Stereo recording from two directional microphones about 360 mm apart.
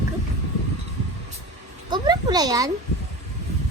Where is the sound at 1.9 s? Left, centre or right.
Centre.